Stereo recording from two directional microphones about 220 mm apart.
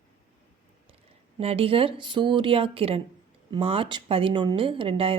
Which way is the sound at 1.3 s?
25° right (ahead or behind).